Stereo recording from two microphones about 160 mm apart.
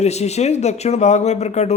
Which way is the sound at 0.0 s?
45° left (ahead or behind).